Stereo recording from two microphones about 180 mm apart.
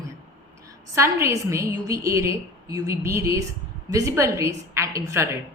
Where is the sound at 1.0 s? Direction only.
15° right (ahead or behind).